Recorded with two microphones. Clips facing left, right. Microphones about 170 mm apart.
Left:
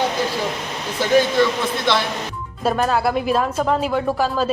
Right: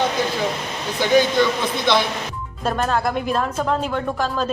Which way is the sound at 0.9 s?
Centre (ahead or behind).